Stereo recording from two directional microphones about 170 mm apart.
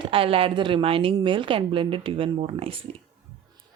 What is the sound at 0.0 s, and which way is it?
A woman's voice, 35° right (ahead or behind).